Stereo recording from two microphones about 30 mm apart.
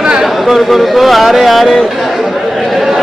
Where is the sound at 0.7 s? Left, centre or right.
Centre.